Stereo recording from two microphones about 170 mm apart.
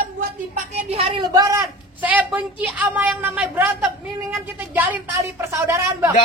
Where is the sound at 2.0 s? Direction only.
10° right (ahead or behind).